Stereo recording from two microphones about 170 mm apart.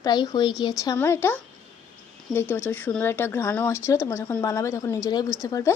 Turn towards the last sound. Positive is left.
turn(degrees=20)  # may be behind; listen again after turning